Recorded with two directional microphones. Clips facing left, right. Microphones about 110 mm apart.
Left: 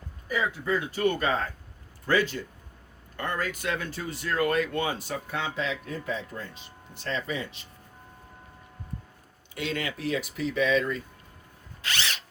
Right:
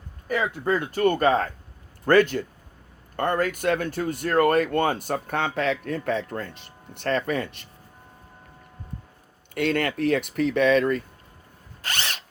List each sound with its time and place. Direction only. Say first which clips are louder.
0.3 s speech: right 4 dB; 55° right (ahead or behind)
9.6 s speech: right 8 dB; 55° right (ahead or behind)
11.8 s drill: right 1 dB; 50° right (ahead or behind)